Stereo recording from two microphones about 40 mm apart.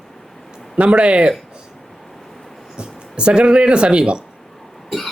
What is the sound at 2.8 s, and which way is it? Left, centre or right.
Speech, right.